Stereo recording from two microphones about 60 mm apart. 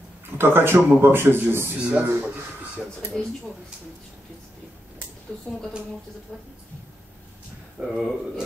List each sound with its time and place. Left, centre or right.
0.4 s speech: right
1.8 s speech: centre
3.1 s speech: centre
7.8 s speech: centre